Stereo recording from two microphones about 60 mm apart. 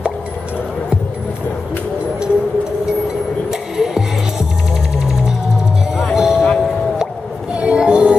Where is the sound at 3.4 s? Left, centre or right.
Centre.